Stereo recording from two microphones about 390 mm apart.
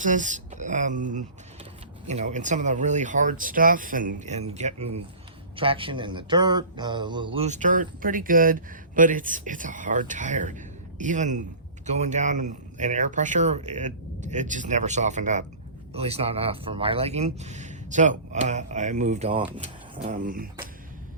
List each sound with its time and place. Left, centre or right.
0.0 s speech: centre